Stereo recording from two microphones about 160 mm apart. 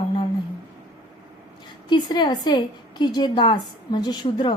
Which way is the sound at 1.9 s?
25° left (ahead or behind).